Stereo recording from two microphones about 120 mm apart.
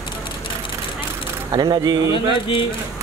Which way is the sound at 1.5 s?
35° right (ahead or behind).